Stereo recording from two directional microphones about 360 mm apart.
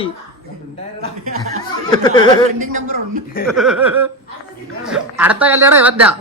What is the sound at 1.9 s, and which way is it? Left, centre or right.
Speech, centre.